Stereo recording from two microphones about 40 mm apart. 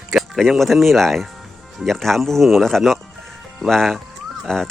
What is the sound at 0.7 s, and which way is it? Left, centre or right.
Speech, centre.